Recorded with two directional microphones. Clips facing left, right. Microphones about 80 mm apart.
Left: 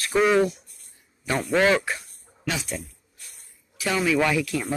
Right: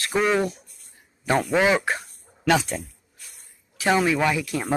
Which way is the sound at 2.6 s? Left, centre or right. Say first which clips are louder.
Right 3 dB; right.